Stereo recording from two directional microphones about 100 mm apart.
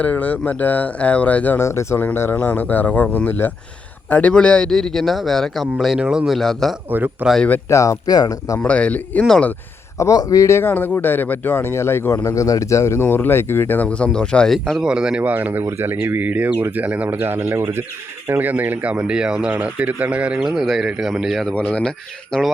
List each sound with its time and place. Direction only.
0.0 s a man's voice: 15° left (ahead or behind)
6.9 s speech: 20° right (ahead or behind)
7.7 s speech: 30° left (ahead or behind)
8.5 s speech: 15° left (ahead or behind)
10.0 s speech: 35° left (ahead or behind); by 14.8 s 5° left (ahead or behind)
14.8 s speech: 10° right (ahead or behind)
21.5 s speech: 15° left (ahead or behind)